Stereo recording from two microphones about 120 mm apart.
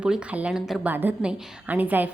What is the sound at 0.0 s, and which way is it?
A woman's voice, 10° right (ahead or behind).